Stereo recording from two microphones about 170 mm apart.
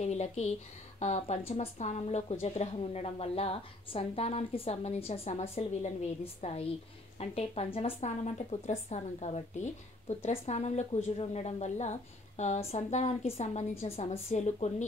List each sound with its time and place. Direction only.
0.0 s a woman's voice: 40° left (ahead or behind)